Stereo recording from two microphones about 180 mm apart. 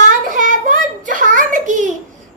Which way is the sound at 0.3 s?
45° right (ahead or behind).